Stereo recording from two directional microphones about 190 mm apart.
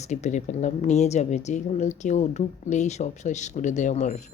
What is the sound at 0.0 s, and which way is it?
Speech, 35° left (ahead or behind).